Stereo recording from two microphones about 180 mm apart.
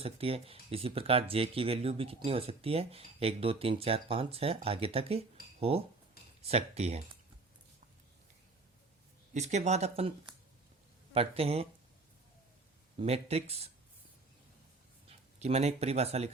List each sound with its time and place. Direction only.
0.0 s speech: 35° right (ahead or behind)
9.3 s speech: 40° right (ahead or behind)
13.0 s speech: 35° right (ahead or behind)
15.4 s speech: 35° right (ahead or behind)